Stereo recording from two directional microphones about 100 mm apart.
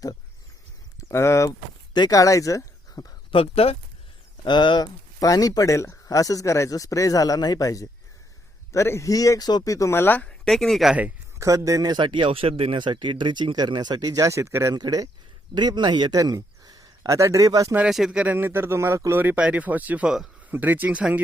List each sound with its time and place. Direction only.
0.9 s speech: 30° left (ahead or behind)
1.9 s speech: 40° left (ahead or behind)
3.3 s speech: 70° left (ahead or behind)
4.4 s speech: 50° left (ahead or behind)
5.2 s speech: 35° left (ahead or behind); by 10.2 s 20° left (ahead or behind)
10.2 s speech: 5° left (ahead or behind)
11.3 s a man's voice: 35° right (ahead or behind)
14.8 s speech: 40° right (ahead or behind)
17.7 s speech: 5° right (ahead or behind)
18.3 s speech: 20° right (ahead or behind)
19.4 s speech: 15° right (ahead or behind)